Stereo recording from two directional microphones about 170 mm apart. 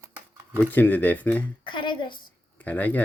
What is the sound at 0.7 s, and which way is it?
Speech, 10° left (ahead or behind).